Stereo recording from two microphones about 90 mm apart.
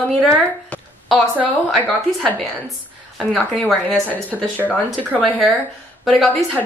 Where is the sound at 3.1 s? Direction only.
5° right (ahead or behind).